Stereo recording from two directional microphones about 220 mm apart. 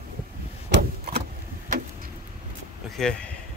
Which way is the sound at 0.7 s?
40° right (ahead or behind).